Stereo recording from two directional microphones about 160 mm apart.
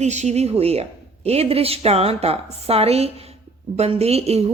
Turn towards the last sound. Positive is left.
turn(degrees=-40)  # may be behind; listen again after turning